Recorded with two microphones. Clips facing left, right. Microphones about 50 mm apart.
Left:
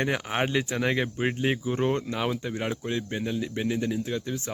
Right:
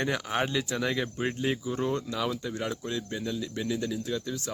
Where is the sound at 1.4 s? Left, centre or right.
Left.